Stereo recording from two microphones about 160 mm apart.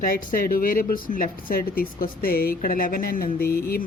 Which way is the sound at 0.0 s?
60° left (ahead or behind).